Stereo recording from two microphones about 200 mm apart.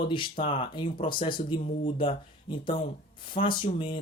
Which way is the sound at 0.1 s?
25° left (ahead or behind).